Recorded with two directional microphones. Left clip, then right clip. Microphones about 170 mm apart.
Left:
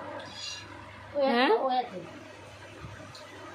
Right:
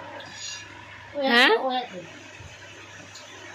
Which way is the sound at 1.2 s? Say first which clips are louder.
Right 6 dB; 5° right (ahead or behind).